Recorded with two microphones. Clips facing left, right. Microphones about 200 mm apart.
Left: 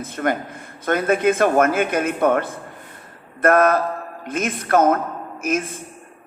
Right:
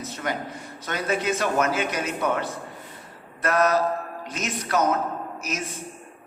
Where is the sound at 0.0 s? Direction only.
55° left (ahead or behind).